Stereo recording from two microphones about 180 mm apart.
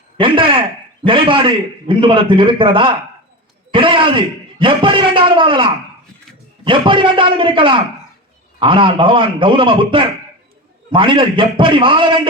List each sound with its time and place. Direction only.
0.2 s a man's voice: 30° right (ahead or behind)